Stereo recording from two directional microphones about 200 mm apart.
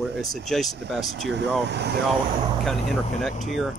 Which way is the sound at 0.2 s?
Centre (ahead or behind).